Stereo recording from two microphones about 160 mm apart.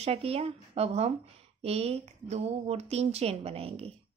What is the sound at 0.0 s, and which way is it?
A woman's voice, 40° right (ahead or behind).